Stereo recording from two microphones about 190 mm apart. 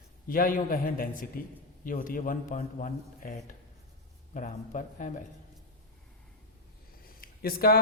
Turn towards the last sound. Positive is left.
turn(degrees=50)  # may be behind; listen again after turning